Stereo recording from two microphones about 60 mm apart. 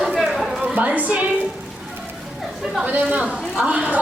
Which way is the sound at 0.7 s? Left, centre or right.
Right.